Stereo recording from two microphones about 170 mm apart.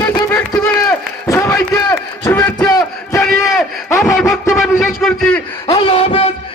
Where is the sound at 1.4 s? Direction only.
15° left (ahead or behind).